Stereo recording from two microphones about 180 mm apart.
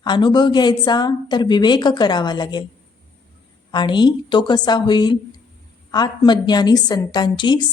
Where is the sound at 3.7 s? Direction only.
25° left (ahead or behind).